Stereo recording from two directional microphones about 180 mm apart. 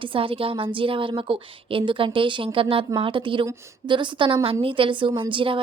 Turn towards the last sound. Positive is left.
turn(degrees=-30)  # may be behind; listen again after turning